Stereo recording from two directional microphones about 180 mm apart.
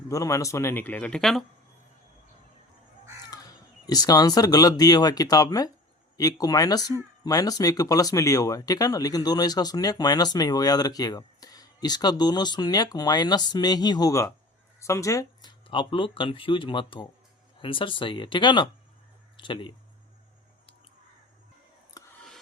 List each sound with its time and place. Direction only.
0.1 s speech: 20° left (ahead or behind); by 1.5 s centre (ahead or behind)
3.8 s speech: 20° left (ahead or behind)
22.0 s a sound: 20° left (ahead or behind)